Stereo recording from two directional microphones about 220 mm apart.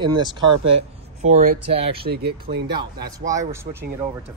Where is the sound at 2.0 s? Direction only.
45° right (ahead or behind).